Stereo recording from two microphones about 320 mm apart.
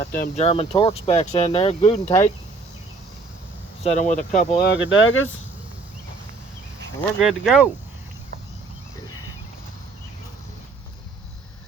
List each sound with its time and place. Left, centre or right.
0.0 s speech: left
3.8 s speech: left
7.2 s speech: centre